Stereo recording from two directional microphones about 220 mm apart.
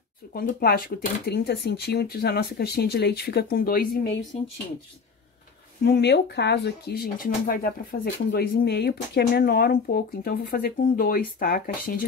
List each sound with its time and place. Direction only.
0.3 s speech: 40° left (ahead or behind)
5.9 s speech: 50° left (ahead or behind)